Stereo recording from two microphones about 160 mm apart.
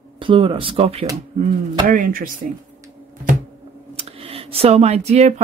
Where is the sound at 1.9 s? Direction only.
60° right (ahead or behind).